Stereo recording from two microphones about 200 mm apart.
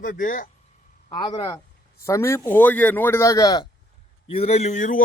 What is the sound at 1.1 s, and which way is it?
A man's voice, 20° left (ahead or behind).